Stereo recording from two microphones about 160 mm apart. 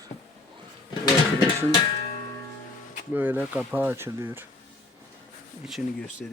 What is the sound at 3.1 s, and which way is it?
Speech, 10° right (ahead or behind).